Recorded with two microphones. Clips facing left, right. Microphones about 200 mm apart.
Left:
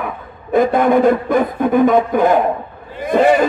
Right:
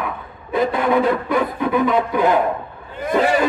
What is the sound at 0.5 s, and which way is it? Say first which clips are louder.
Speech: left 5 dB; 50° left (ahead or behind).